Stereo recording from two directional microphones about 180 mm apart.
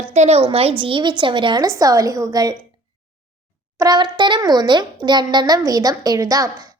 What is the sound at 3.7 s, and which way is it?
A child's voice, 20° right (ahead or behind).